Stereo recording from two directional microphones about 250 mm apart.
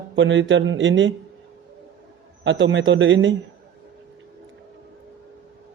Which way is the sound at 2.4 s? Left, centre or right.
Right.